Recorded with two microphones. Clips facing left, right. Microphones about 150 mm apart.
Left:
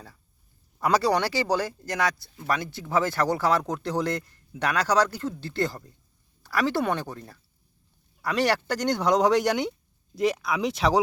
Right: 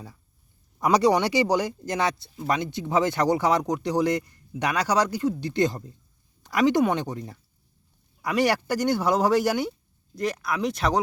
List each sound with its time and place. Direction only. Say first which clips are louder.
0.8 s speech: right 3 dB; 15° right (ahead or behind); by 11.0 s centre (ahead or behind)